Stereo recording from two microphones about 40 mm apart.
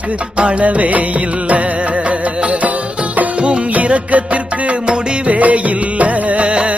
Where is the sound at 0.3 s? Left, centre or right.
Right.